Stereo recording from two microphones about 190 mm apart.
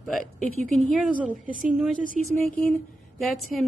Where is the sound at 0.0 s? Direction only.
Centre (ahead or behind).